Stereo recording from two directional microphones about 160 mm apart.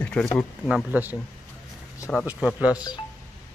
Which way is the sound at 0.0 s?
10° left (ahead or behind).